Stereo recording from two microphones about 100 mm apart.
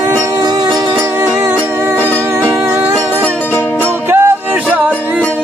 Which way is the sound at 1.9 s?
20° right (ahead or behind).